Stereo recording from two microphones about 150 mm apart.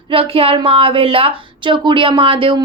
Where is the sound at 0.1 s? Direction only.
40° right (ahead or behind).